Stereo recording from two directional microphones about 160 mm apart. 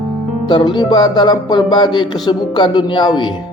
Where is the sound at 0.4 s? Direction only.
25° left (ahead or behind).